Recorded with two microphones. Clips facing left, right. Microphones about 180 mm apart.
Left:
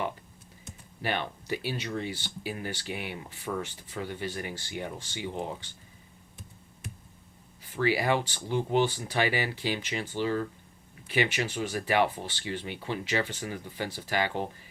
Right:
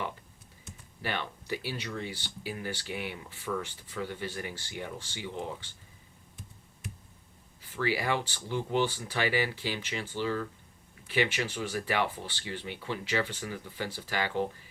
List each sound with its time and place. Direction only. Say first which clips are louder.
1.0 s speech: left 3 dB; 20° left (ahead or behind)
7.8 s speech: left 4 dB; 20° left (ahead or behind)